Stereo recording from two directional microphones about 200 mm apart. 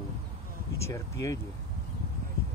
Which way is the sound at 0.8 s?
15° left (ahead or behind).